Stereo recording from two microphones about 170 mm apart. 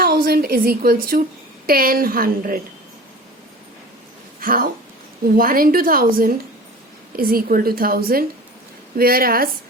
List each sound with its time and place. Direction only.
0.0 s a woman's voice: 65° right (ahead or behind)
4.4 s a woman's voice: 55° right (ahead or behind)